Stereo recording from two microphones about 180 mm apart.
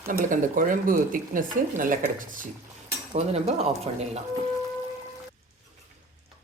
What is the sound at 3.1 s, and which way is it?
Speech, 35° right (ahead or behind).